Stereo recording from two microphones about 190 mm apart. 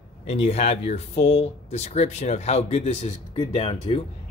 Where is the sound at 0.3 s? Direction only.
35° left (ahead or behind).